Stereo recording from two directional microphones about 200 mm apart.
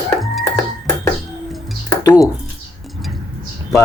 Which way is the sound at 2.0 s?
15° left (ahead or behind).